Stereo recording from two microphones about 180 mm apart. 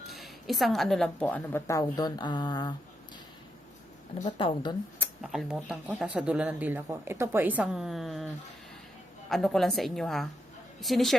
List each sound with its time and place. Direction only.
0.1 s a woman's voice: centre (ahead or behind); by 2.7 s 25° left (ahead or behind)
4.4 s speech: 30° left (ahead or behind)
5.2 s speech: centre (ahead or behind)
9.3 s a woman's voice: centre (ahead or behind)